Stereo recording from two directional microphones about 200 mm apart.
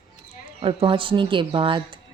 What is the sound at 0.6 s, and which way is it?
A woman's voice, 25° right (ahead or behind).